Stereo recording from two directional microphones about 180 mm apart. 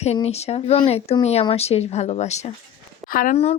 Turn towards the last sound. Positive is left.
turn(degrees=50)  # may be behind; listen again after turning